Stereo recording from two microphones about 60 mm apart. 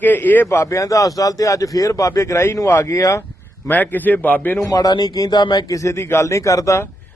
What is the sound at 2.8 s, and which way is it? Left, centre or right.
Speech, left.